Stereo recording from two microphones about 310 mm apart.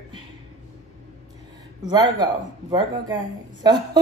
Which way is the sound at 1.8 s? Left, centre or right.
Centre.